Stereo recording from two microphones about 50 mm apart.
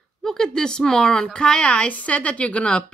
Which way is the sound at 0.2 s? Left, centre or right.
Centre.